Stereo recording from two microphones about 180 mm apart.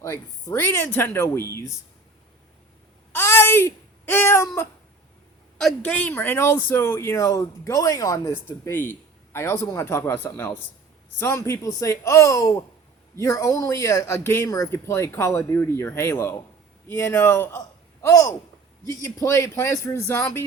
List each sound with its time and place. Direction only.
0.0 s a man's voice: 15° left (ahead or behind)
3.1 s a sound: 15° left (ahead or behind)
5.5 s a man's voice: 5° left (ahead or behind)